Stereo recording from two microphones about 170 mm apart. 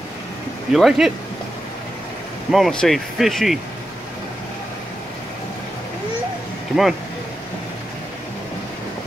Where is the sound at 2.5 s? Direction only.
Centre (ahead or behind).